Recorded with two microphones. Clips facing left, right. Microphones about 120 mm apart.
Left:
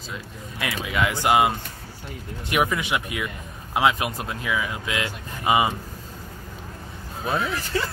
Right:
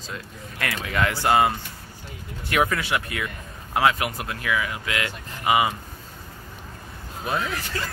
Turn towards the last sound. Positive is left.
turn(degrees=30)  # may be behind; listen again after turning